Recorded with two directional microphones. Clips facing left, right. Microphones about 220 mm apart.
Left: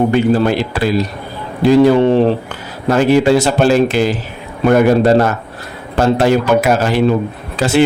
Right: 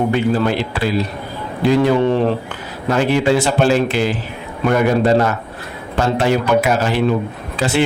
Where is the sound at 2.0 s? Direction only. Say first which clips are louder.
Left 4 dB; 30° left (ahead or behind).